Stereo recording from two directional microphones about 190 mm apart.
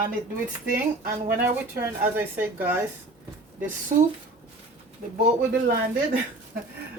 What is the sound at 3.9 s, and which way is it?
Speech, 40° right (ahead or behind).